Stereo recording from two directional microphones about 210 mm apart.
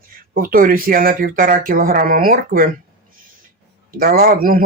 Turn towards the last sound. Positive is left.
turn(degrees=-45)  # may be behind; listen again after turning